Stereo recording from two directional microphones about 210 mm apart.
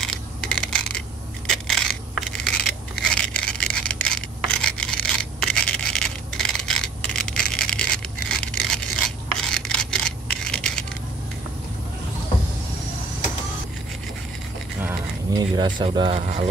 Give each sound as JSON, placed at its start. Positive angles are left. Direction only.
{"t": 0.0, "sound": "coin", "side_deg": 5}
{"t": 1.5, "sound": "a sound", "side_deg": 0}
{"t": 15.3, "sound": "speech", "side_deg": -20}